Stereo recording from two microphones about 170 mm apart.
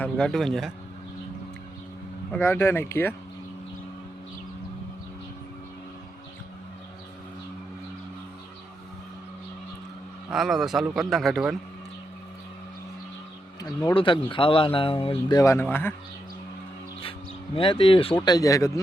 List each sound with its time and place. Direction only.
0.0 s a man's voice: 5° left (ahead or behind)
2.3 s speech: 10° left (ahead or behind)
10.2 s a man's voice: centre (ahead or behind)
13.9 s speech: 30° left (ahead or behind)
15.4 s speech: 15° left (ahead or behind)
17.0 s a sound: 30° left (ahead or behind)
18.2 s speech: 20° left (ahead or behind)